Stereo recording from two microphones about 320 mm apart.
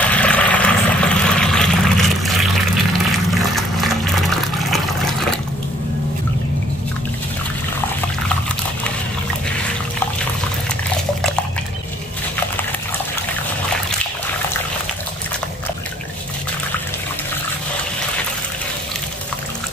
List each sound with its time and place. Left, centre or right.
0.0 s vehicle: centre
3.5 s water: centre